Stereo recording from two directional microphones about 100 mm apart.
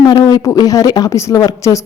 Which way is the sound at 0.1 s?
45° left (ahead or behind).